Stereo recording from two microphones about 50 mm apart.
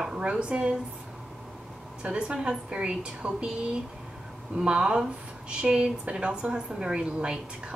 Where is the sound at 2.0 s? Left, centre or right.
Centre.